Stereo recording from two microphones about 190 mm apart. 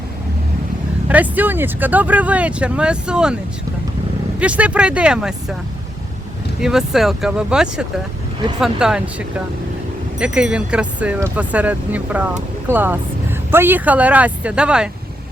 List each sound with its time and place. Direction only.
1.0 s speech: 10° right (ahead or behind)
4.4 s speech: 5° right (ahead or behind)
6.6 s speech: centre (ahead or behind)